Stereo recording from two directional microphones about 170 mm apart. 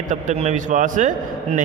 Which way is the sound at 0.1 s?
45° right (ahead or behind).